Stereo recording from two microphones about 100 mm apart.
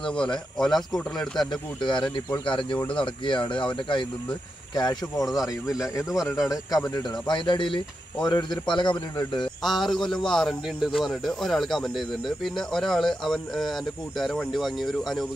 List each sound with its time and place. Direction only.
0.0 s a man's voice: 10° left (ahead or behind)
1.8 s a man's voice: 50° left (ahead or behind)
4.7 s speech: 40° left (ahead or behind)
6.0 s a man's voice: 5° right (ahead or behind)
6.9 s a man's voice: 45° left (ahead or behind)
9.6 s a man's voice: centre (ahead or behind)